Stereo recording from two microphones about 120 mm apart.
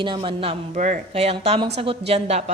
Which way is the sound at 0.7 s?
90° right.